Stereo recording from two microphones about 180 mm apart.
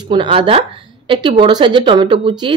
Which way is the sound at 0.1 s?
25° right (ahead or behind).